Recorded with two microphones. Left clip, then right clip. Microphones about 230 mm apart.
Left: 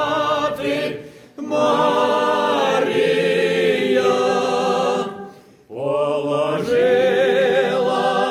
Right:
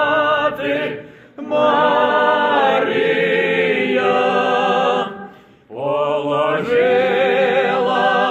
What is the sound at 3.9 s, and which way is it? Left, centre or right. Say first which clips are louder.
Music: right 1 dB; left.